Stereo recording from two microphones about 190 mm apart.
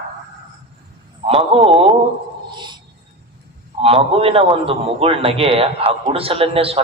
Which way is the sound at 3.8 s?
30° right (ahead or behind).